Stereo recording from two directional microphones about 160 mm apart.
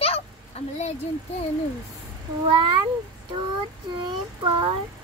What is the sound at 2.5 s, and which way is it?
Speech, 30° right (ahead or behind).